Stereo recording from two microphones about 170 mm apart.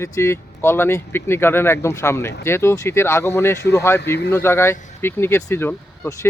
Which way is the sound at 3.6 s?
75° left (ahead or behind).